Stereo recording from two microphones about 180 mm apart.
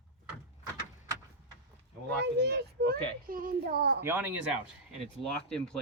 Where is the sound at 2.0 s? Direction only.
65° right (ahead or behind).